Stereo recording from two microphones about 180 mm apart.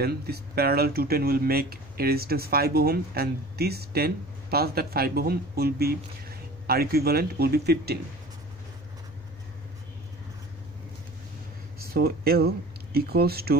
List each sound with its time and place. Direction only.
0.0 s speech: 60° right (ahead or behind)
11.8 s speech: 60° right (ahead or behind)